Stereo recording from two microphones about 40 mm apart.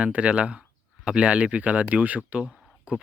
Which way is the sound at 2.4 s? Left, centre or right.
Right.